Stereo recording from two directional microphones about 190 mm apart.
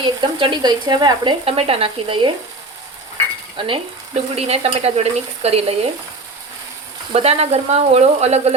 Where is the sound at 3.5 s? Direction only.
25° right (ahead or behind).